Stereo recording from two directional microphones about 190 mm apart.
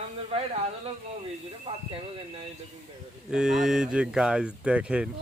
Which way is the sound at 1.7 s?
25° right (ahead or behind).